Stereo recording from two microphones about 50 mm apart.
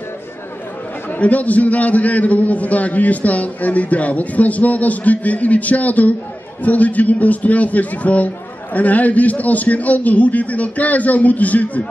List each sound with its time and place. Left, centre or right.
1.2 s a man's voice: left